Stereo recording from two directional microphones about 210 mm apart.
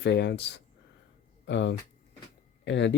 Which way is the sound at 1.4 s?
55° left (ahead or behind).